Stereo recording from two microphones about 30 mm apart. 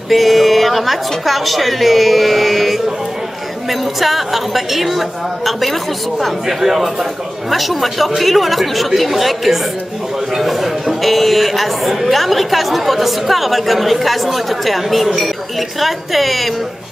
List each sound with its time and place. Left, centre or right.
0.1 s speech: centre
4.0 s a man's voice: centre